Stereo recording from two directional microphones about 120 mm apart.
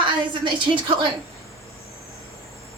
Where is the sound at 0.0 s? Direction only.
40° right (ahead or behind).